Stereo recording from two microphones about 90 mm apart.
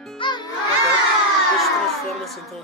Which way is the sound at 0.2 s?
55° left (ahead or behind).